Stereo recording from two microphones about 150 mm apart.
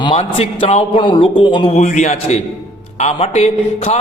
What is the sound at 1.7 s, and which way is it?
A man's voice, 50° left (ahead or behind).